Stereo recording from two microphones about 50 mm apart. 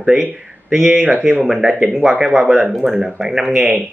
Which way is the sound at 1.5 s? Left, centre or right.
Centre.